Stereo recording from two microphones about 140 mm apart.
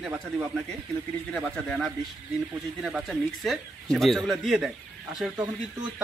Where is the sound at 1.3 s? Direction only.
5° left (ahead or behind).